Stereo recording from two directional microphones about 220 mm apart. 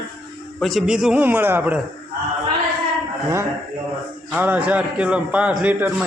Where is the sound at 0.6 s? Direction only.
Centre (ahead or behind).